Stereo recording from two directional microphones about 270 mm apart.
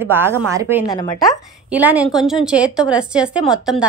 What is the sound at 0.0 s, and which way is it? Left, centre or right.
Speech, centre.